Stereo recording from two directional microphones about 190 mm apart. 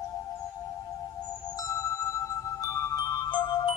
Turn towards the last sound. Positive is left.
turn(degrees=25)  # may be behind; listen again after turning